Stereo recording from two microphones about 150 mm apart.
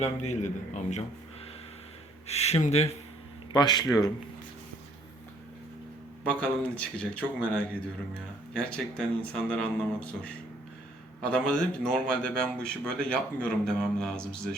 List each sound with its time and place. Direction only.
0.0 s a man's voice: 50° left (ahead or behind)
2.2 s a man's voice: 45° left (ahead or behind)
3.5 s speech: 30° left (ahead or behind)
6.2 s a man's voice: 10° left (ahead or behind)